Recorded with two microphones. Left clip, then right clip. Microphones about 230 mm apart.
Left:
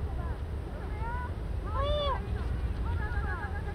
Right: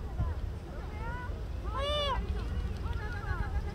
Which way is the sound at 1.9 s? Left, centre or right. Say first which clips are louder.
Even; right.